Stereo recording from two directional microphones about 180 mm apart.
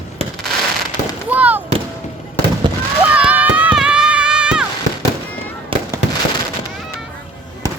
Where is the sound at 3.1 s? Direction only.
10° right (ahead or behind).